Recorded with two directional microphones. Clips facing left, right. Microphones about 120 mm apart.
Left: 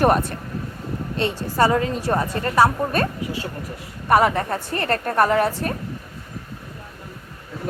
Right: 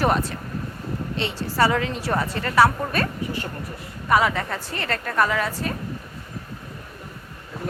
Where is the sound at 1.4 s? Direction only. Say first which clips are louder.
Left 2 dB; 20° left (ahead or behind).